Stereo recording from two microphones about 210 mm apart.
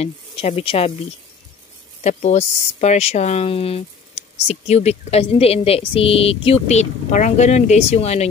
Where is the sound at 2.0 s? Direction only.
30° left (ahead or behind).